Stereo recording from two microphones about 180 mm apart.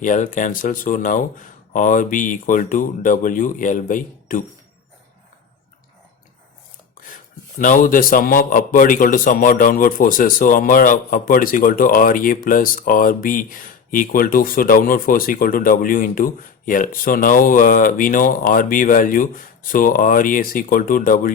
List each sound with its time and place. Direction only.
0.0 s speech: 45° left (ahead or behind)
7.6 s speech: 50° left (ahead or behind)